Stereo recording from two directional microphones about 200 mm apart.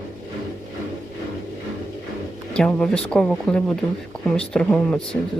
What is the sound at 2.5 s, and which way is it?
Speech, 5° left (ahead or behind).